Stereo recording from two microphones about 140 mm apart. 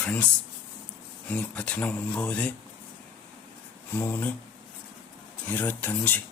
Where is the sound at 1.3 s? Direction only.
10° left (ahead or behind).